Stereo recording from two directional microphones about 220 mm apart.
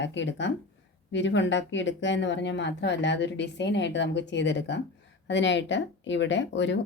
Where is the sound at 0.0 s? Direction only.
55° left (ahead or behind).